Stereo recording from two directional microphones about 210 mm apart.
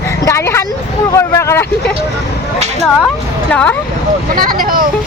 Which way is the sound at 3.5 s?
5° left (ahead or behind).